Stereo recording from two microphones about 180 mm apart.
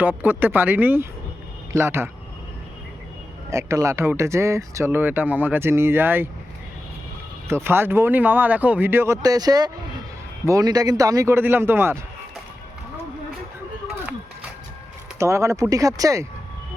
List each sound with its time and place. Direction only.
0.0 s speech: 10° right (ahead or behind)
3.5 s speech: 15° right (ahead or behind)
7.4 s speech: 15° right (ahead or behind)
15.2 s speech: 15° right (ahead or behind)